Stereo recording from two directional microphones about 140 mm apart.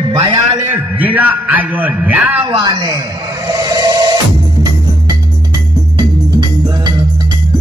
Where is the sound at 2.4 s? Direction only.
35° right (ahead or behind).